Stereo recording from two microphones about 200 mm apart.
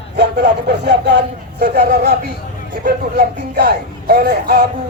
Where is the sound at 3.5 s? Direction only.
50° right (ahead or behind).